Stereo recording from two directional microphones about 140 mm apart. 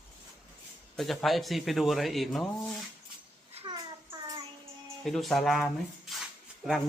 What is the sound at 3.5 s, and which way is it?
Child singing, 35° right (ahead or behind).